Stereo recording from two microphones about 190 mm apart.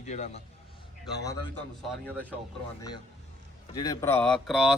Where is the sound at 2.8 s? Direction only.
20° left (ahead or behind).